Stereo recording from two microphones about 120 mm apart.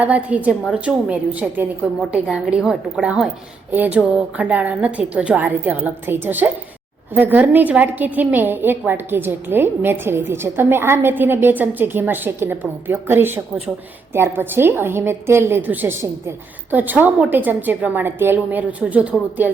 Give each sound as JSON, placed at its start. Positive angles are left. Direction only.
{"t": 0.0, "sound": "a woman's voice", "side_deg": -10}